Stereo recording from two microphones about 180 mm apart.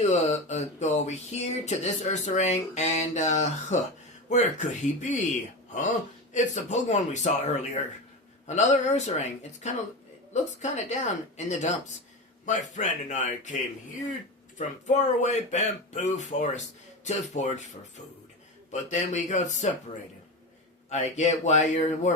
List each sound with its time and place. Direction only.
0.1 s speech: 40° left (ahead or behind)
6.3 s a man's voice: 40° left (ahead or behind)
14.8 s speech: 40° left (ahead or behind)
18.7 s speech: 40° left (ahead or behind)
20.9 s speech: 40° left (ahead or behind)